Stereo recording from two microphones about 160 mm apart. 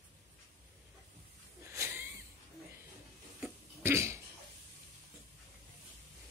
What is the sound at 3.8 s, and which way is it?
Cough, 15° right (ahead or behind).